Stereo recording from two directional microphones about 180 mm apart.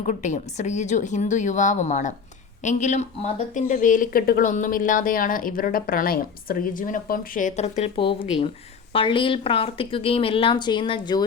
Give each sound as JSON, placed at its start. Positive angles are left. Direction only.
{"t": 0.0, "sound": "a woman's voice", "side_deg": 45}